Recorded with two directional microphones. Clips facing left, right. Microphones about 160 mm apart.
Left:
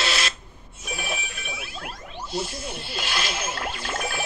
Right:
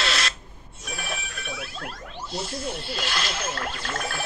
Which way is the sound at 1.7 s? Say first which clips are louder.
Even; centre (ahead or behind).